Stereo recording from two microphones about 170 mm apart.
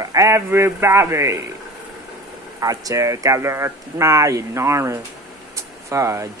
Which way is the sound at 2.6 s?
20° right (ahead or behind).